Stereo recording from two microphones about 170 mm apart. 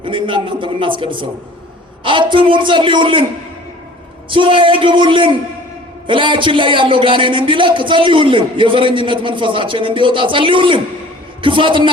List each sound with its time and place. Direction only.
0.0 s a man's voice: 30° right (ahead or behind)
4.3 s a man's voice: 30° right (ahead or behind)